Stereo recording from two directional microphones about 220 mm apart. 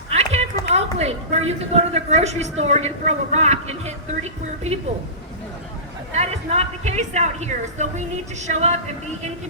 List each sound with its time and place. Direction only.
0.1 s a sound: 30° right (ahead or behind)
0.9 s a woman's voice: 30° right (ahead or behind)
6.1 s a woman's voice: 30° right (ahead or behind)